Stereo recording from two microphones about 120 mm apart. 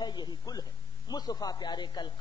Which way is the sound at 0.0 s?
35° left (ahead or behind).